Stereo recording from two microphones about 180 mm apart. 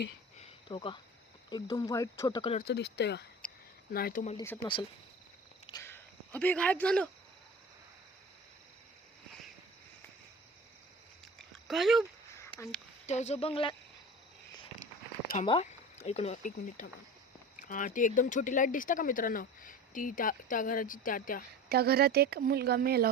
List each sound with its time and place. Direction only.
0.3 s a sound: 30° left (ahead or behind)
1.5 s speech: 25° left (ahead or behind)
2.6 s speech: 70° left (ahead or behind)
3.9 s speech: 55° left (ahead or behind)
4.4 s speech: 10° left (ahead or behind)
5.7 s speech: 15° left (ahead or behind)
11.7 s speech: centre (ahead or behind)
13.1 s speech: 40° left (ahead or behind)
15.4 s speech: 35° left (ahead or behind)
21.7 s speech: 60° right (ahead or behind)